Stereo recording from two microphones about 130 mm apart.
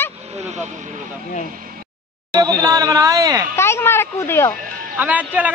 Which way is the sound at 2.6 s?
25° right (ahead or behind).